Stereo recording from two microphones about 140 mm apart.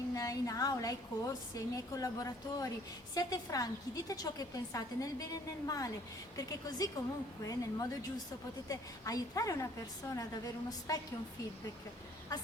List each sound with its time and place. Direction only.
0.1 s a woman's voice: 25° left (ahead or behind)